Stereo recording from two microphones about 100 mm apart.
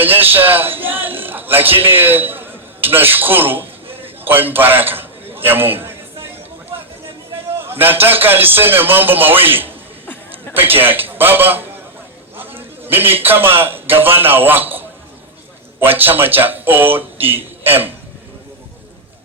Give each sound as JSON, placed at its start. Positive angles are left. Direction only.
{"t": 0.0, "sound": "a man's voice", "side_deg": -20}
{"t": 7.7, "sound": "speech", "side_deg": -20}
{"t": 12.5, "sound": "a sound", "side_deg": -20}
{"t": 13.2, "sound": "speech", "side_deg": -20}